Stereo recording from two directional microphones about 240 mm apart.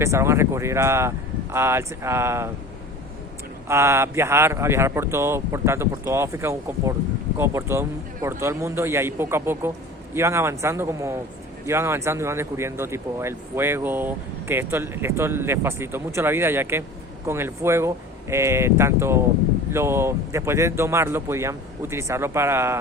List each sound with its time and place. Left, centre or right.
0.0 s speech: centre
3.7 s speech: centre